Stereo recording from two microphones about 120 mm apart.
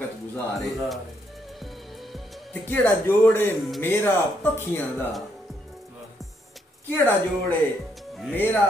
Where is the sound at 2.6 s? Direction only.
20° left (ahead or behind).